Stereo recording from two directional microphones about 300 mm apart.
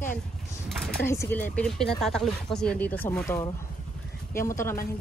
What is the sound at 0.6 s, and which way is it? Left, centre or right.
Speech, centre.